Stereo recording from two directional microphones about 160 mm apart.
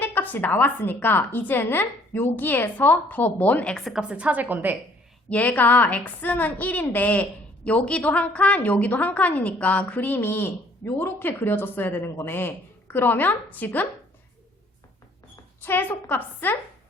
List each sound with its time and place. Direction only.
0.0 s a woman's voice: 10° left (ahead or behind); by 4.8 s 10° right (ahead or behind)
5.3 s a woman's voice: 10° left (ahead or behind)
15.6 s a woman's voice: 15° left (ahead or behind)